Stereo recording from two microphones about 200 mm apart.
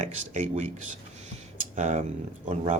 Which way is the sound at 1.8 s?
35° right (ahead or behind).